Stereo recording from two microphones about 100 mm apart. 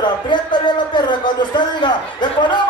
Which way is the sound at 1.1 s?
50° left (ahead or behind).